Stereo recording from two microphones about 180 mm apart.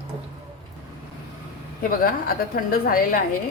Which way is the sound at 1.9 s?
55° left (ahead or behind).